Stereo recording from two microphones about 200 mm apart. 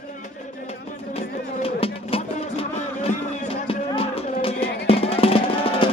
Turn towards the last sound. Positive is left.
turn(degrees=30)  # may be behind; listen again after turning